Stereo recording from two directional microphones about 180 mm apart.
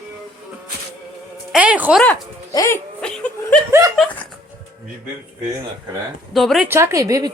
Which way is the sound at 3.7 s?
15° right (ahead or behind).